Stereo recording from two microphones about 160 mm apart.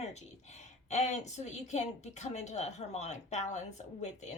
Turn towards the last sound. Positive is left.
turn(degrees=45)  # may be behind; listen again after turning